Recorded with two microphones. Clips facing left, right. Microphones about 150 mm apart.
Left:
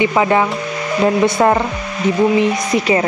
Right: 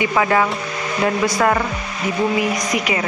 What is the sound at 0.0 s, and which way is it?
Speech, 20° left (ahead or behind).